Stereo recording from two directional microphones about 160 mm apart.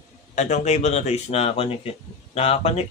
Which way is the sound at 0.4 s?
45° left (ahead or behind).